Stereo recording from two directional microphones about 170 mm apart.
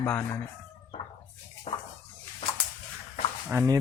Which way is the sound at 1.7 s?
35° left (ahead or behind).